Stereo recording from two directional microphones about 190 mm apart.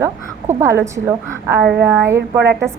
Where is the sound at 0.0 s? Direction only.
15° right (ahead or behind).